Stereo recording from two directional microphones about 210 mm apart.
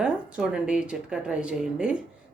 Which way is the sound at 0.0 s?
5° right (ahead or behind).